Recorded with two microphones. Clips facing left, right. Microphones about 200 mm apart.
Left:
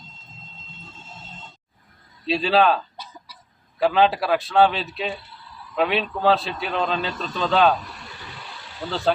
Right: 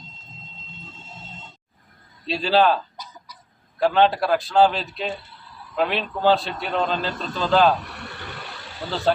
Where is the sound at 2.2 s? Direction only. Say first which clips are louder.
Even; centre (ahead or behind).